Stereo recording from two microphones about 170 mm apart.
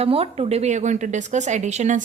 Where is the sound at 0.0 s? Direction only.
35° right (ahead or behind).